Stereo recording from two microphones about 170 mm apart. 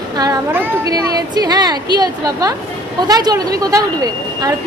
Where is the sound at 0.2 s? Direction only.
15° right (ahead or behind).